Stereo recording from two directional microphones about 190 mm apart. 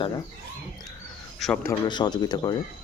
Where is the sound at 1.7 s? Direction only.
20° left (ahead or behind).